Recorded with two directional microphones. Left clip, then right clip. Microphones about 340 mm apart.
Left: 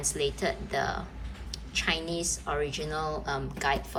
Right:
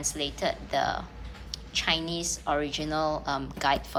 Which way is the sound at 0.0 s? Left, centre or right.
Centre.